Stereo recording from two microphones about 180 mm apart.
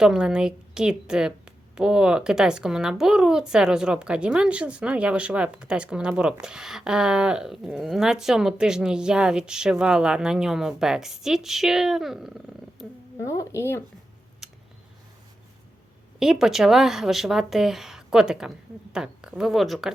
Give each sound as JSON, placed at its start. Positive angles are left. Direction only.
{"t": 0.0, "sound": "a woman's voice", "side_deg": -5}
{"t": 13.2, "sound": "speech", "side_deg": 15}
{"t": 14.4, "sound": "a sound", "side_deg": 0}
{"t": 16.2, "sound": "a woman's voice", "side_deg": 0}